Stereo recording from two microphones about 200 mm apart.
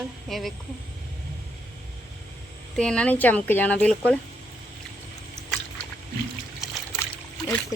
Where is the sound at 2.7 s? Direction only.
5° left (ahead or behind).